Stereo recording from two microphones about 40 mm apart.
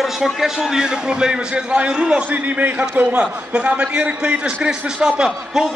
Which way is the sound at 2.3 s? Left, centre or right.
Right.